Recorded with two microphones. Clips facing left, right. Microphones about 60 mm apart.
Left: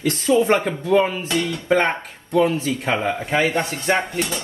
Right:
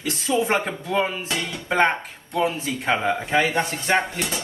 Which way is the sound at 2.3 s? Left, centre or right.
Left.